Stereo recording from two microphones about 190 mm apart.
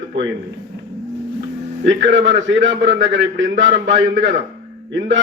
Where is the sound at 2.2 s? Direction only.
75° right (ahead or behind).